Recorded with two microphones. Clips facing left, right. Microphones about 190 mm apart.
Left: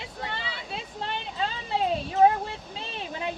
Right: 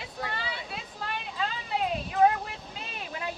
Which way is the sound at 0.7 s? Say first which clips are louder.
Left 3 dB; 25° left (ahead or behind).